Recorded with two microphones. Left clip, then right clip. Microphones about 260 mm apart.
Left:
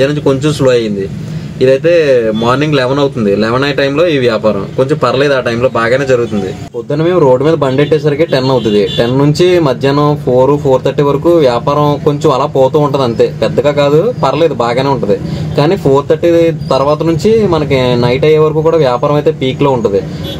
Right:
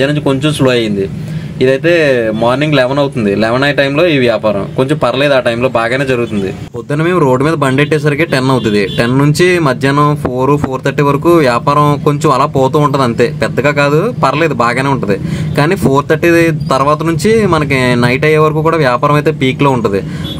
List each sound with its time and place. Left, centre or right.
0.0 s speech: centre